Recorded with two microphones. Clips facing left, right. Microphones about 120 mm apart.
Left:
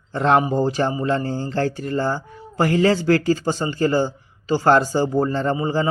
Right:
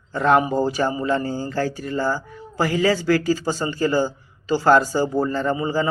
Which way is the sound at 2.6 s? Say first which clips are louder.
Left 2 dB; 55° left (ahead or behind).